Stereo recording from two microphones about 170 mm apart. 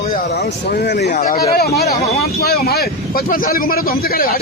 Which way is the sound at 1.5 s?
65° left (ahead or behind).